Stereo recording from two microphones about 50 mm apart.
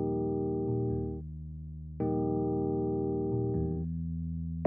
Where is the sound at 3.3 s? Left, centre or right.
Centre.